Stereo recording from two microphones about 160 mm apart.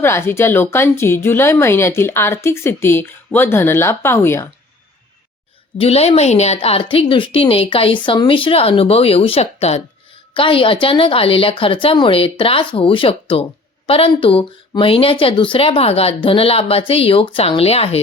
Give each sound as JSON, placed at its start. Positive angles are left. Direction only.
{"t": 0.0, "sound": "speech", "side_deg": 15}
{"t": 5.7, "sound": "speech", "side_deg": 40}